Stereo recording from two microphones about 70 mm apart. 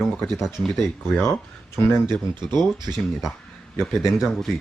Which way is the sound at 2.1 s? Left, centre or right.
Right.